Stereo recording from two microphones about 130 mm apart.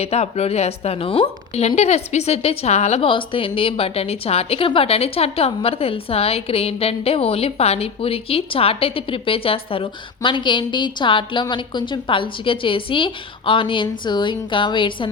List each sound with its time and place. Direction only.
0.0 s a woman's voice: 55° left (ahead or behind); by 15.1 s 40° left (ahead or behind)